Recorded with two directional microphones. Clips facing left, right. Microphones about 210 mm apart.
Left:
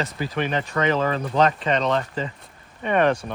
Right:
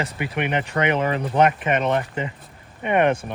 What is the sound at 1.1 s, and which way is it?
Speech, 20° right (ahead or behind).